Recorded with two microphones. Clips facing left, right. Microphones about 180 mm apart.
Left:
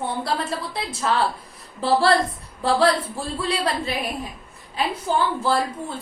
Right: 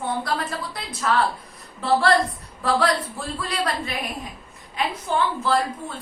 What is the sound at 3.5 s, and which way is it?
Speech, 30° left (ahead or behind).